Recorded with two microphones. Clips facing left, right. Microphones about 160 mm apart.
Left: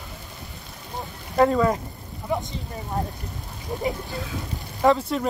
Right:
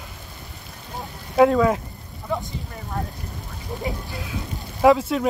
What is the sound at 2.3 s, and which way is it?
Speech, 15° left (ahead or behind).